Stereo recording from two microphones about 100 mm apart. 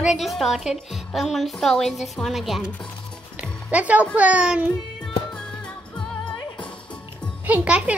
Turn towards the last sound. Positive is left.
turn(degrees=-15)  # may be behind; listen again after turning